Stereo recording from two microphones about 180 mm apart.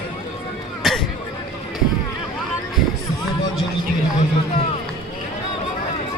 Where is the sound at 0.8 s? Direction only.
Centre (ahead or behind).